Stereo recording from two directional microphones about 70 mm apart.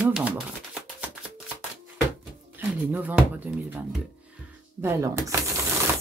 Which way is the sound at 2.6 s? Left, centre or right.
Right.